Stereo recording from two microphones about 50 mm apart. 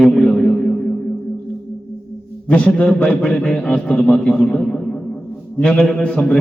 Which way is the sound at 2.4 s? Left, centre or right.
Left.